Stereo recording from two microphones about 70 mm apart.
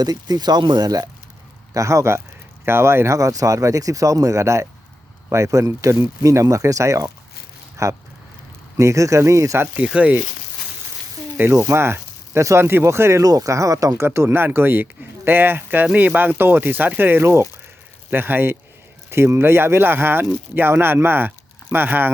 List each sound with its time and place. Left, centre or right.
0.0 s speech: right
1.7 s speech: right
3.2 s speech: right
9.7 s speech: centre
11.3 s speech: right
13.2 s speech: right
14.1 s speech: right